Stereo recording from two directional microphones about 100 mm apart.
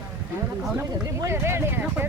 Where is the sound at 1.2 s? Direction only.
25° right (ahead or behind).